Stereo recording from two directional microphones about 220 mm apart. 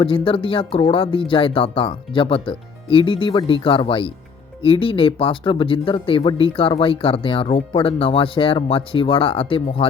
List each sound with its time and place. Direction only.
0.0 s speech: 25° left (ahead or behind)